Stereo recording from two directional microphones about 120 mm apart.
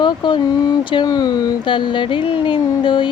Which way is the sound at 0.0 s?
40° left (ahead or behind).